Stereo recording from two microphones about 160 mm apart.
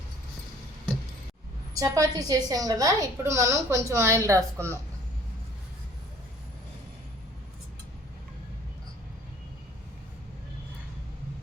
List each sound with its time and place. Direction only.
1.7 s a woman's voice: 20° right (ahead or behind)